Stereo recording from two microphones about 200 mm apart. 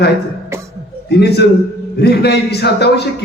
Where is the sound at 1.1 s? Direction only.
55° left (ahead or behind).